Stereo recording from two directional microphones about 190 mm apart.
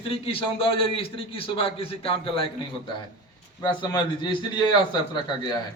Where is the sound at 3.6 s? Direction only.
25° left (ahead or behind).